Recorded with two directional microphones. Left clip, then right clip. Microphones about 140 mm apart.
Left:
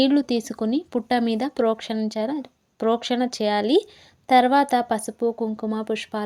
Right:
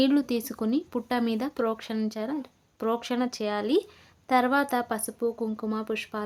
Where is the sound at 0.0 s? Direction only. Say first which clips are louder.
Left 4 dB; 25° left (ahead or behind).